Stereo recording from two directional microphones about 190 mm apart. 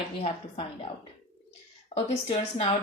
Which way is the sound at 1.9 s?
35° left (ahead or behind).